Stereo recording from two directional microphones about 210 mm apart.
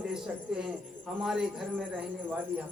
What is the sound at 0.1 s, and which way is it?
A man's voice, 5° right (ahead or behind).